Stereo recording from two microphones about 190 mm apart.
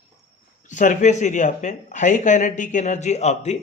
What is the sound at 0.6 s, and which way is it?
A man's voice, 40° left (ahead or behind).